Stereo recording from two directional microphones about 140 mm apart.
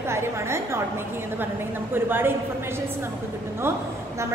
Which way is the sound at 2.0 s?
15° right (ahead or behind).